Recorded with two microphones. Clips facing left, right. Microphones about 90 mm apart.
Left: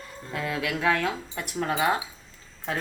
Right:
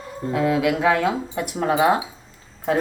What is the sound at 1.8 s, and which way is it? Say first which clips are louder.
Speech: right 7 dB; 25° right (ahead or behind).